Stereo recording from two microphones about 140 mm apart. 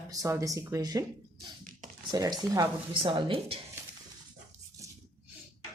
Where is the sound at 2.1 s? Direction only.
25° right (ahead or behind).